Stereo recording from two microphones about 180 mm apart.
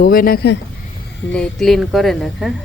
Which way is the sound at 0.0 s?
55° left (ahead or behind).